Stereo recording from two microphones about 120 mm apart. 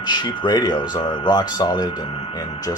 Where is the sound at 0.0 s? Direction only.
40° left (ahead or behind).